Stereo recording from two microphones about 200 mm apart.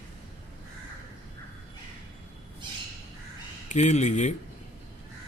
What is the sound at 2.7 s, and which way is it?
Squawk, 20° right (ahead or behind).